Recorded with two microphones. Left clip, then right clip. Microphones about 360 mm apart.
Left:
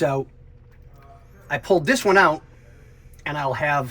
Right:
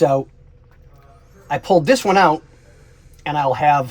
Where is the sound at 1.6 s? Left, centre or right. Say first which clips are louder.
Right 5 dB; centre.